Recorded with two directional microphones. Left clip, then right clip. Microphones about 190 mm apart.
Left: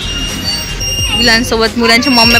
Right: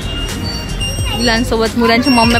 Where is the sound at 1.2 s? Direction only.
5° left (ahead or behind).